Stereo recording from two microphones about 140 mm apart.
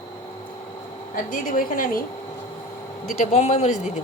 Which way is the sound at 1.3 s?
80° left.